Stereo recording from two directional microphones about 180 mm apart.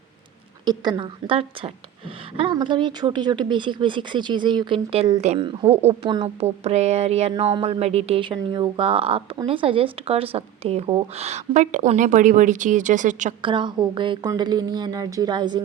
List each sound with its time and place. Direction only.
0.6 s speech: 25° right (ahead or behind); by 13.3 s 45° right (ahead or behind)
13.4 s speech: 25° right (ahead or behind)